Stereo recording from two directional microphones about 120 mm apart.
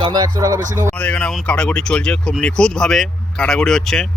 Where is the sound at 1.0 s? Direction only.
10° left (ahead or behind).